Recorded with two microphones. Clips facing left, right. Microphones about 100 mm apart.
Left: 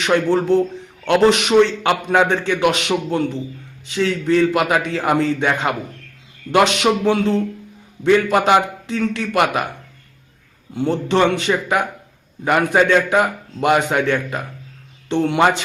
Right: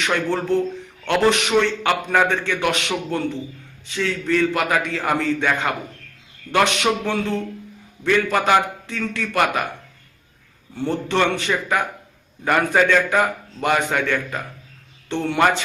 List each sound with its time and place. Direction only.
0.0 s a man's voice: 20° left (ahead or behind)
10.8 s a man's voice: 20° left (ahead or behind)